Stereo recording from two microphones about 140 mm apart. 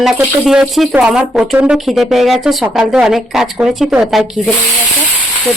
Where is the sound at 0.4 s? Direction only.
5° right (ahead or behind).